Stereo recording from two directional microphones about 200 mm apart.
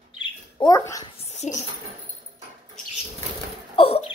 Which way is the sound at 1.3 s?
35° left (ahead or behind).